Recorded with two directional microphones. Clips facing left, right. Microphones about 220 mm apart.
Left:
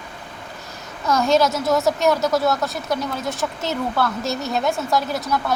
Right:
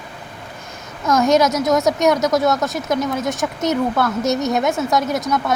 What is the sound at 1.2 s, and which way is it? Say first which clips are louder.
Speech: right 3 dB; 20° right (ahead or behind).